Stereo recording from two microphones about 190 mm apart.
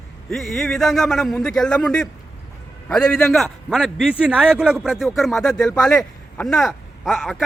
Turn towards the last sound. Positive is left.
turn(degrees=0)  # may be behind; listen again after turning